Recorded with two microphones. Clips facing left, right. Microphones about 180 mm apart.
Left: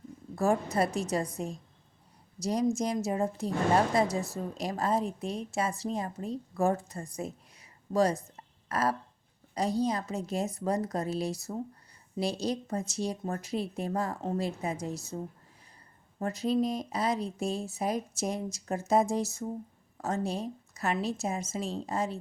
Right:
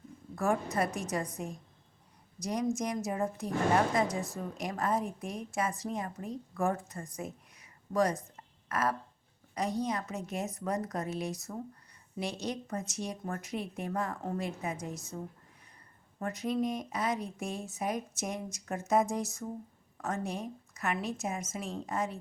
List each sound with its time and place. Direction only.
0.3 s a woman's voice: 25° left (ahead or behind)
2.4 s a woman's voice: 30° left (ahead or behind)
7.2 s a sound: 30° left (ahead or behind)
9.6 s a woman's voice: 30° left (ahead or behind)